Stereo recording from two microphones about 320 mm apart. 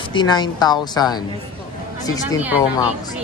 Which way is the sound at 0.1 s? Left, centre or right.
Centre.